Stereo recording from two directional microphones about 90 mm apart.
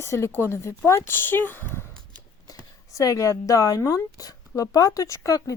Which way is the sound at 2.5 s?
40° left (ahead or behind).